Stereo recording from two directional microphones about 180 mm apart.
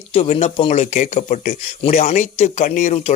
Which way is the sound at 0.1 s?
35° left (ahead or behind).